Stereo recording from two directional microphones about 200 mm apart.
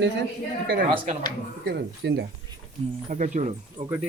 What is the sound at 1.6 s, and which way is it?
Speech, 60° right (ahead or behind).